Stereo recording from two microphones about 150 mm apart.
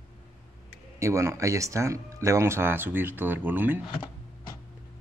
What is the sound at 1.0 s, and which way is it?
Speech, 20° right (ahead or behind).